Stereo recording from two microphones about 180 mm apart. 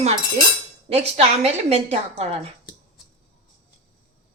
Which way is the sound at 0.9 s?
35° right (ahead or behind).